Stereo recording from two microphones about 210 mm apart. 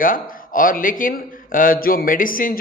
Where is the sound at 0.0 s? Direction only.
40° left (ahead or behind).